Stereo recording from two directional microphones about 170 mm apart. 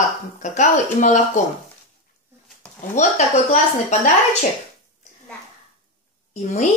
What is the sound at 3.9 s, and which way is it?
Speech, 45° left (ahead or behind).